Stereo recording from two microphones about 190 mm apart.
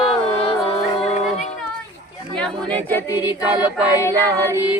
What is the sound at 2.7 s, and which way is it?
Speech, 10° left (ahead or behind).